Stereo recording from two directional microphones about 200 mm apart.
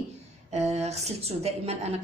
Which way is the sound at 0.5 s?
35° right (ahead or behind).